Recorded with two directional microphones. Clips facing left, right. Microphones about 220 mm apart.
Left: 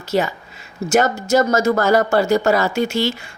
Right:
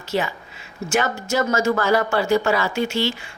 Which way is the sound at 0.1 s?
45° left (ahead or behind).